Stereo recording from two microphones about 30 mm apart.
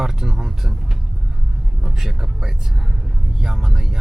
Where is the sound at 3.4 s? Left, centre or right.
Centre.